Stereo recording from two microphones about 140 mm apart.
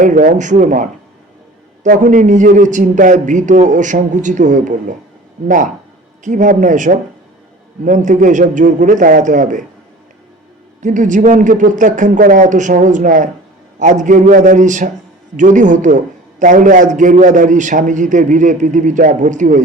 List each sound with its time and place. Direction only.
0.0 s a man's voice: 70° right (ahead or behind)
10.8 s a man's voice: 65° right (ahead or behind)